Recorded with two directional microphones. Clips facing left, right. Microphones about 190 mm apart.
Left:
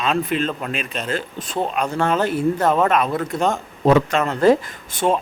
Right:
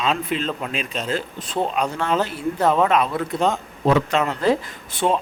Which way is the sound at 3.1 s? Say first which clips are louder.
Left 1 dB; 45° left (ahead or behind).